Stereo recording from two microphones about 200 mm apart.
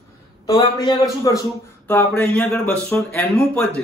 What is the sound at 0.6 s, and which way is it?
A man's voice, 20° left (ahead or behind).